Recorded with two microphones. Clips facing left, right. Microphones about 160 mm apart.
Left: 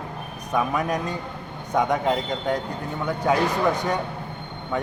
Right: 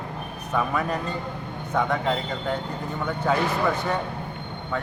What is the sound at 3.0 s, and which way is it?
Speech, 10° left (ahead or behind).